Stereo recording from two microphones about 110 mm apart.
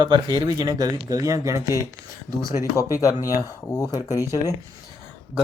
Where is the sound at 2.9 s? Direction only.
30° left (ahead or behind).